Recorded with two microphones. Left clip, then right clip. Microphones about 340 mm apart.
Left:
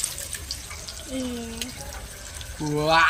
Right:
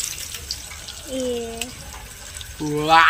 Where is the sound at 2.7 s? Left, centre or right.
Centre.